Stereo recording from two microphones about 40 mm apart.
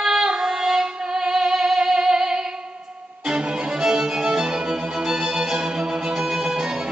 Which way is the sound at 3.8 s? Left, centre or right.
Centre.